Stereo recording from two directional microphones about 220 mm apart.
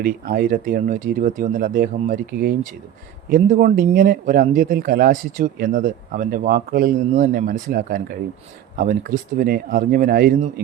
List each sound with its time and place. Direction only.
0.0 s speech: 40° right (ahead or behind)